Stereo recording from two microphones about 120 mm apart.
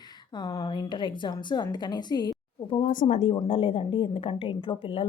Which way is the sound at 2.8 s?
90° left.